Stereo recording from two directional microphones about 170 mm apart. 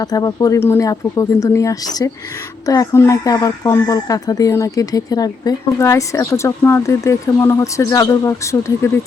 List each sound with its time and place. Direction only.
0.0 s speech: 20° left (ahead or behind)